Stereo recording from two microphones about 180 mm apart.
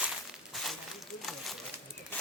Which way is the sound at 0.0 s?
5° right (ahead or behind).